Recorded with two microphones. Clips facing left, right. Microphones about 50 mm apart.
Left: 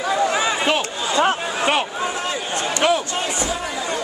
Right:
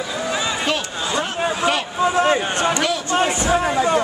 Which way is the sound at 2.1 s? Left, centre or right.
Right.